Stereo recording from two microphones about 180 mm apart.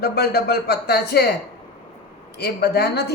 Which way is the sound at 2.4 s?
65° left (ahead or behind).